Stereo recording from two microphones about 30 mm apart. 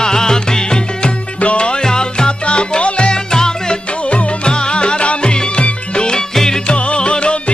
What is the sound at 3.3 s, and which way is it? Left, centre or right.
Music, left.